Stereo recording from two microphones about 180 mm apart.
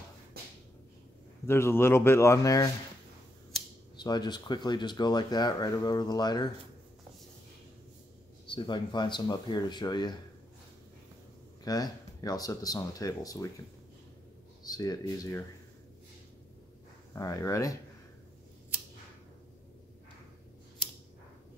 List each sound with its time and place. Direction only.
1.4 s speech: 15° left (ahead or behind)
3.9 s speech: 25° left (ahead or behind)
8.5 s speech: 25° left (ahead or behind)
11.6 s speech: 20° left (ahead or behind)
14.6 s speech: 20° left (ahead or behind)
17.1 s speech: 15° left (ahead or behind)